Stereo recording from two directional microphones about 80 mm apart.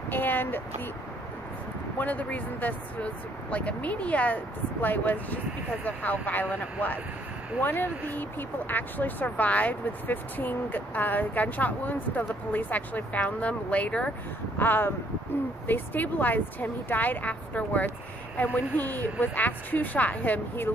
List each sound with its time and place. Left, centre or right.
0.1 s a sound: left
2.0 s speech: centre
7.6 s speech: left